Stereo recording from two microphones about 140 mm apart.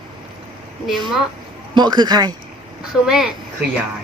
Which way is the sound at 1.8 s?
30° right (ahead or behind).